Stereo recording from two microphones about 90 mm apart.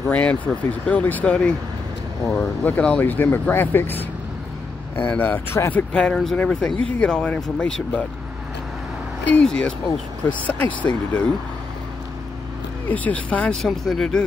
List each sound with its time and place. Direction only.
0.1 s speech: 15° left (ahead or behind)
5.0 s speech: 20° left (ahead or behind)
6.1 s speech: 5° left (ahead or behind)
9.3 s speech: 10° left (ahead or behind)
12.9 s speech: 15° left (ahead or behind)